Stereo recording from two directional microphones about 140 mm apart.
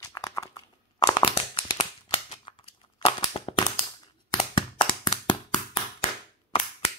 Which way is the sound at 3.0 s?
30° left (ahead or behind).